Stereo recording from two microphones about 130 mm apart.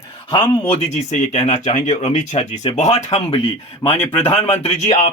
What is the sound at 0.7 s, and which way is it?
Speech, 60° left (ahead or behind).